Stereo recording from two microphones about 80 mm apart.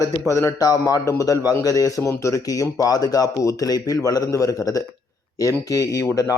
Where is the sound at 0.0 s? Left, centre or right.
Left.